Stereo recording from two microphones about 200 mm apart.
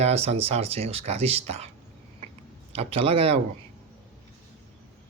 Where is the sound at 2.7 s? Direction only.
30° right (ahead or behind).